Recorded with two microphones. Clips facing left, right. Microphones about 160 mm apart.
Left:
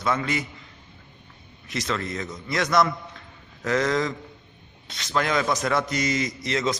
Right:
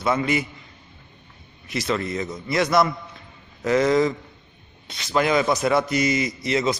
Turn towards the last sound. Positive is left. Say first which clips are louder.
# right 3 dB
turn(degrees=-10)  # may be behind; listen again after turning